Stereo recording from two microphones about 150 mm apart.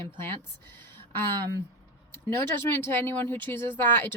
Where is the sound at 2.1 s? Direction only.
15° left (ahead or behind).